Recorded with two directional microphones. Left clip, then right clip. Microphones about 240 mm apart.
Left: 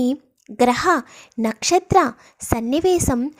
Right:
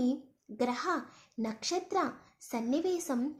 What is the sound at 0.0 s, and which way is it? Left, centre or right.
A woman's voice, left.